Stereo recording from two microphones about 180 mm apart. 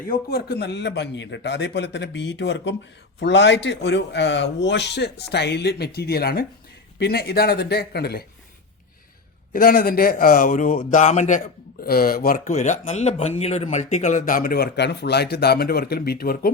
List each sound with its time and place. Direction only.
0.1 s speech: 60° left (ahead or behind)
9.5 s speech: 50° left (ahead or behind)